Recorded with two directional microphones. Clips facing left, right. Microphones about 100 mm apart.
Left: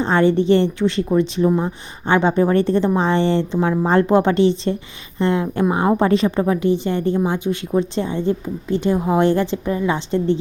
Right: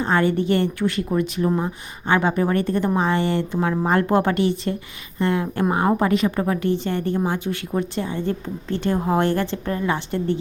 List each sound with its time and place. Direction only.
0.0 s a woman's voice: 25° left (ahead or behind)
1.5 s speech: centre (ahead or behind)
2.0 s a woman's voice: 25° left (ahead or behind)